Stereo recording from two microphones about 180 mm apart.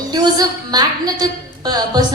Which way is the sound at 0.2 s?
20° right (ahead or behind).